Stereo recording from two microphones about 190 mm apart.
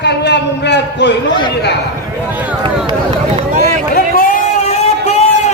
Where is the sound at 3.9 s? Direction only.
40° left (ahead or behind).